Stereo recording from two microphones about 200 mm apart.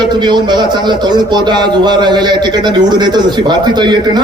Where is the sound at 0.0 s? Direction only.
20° right (ahead or behind).